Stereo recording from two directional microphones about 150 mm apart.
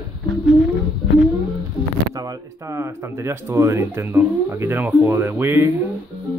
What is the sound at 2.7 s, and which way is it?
Speech, 20° right (ahead or behind).